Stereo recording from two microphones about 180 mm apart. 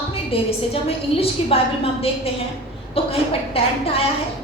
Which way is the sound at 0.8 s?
30° left (ahead or behind).